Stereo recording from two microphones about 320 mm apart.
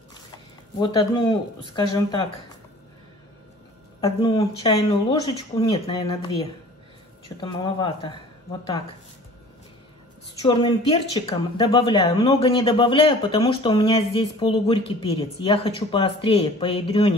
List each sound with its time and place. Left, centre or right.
0.7 s speech: centre
4.0 s speech: centre
10.4 s speech: centre